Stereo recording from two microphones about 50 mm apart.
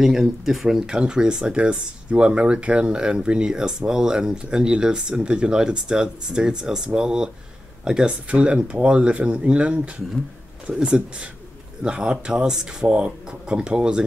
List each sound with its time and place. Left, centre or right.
0.0 s speech: centre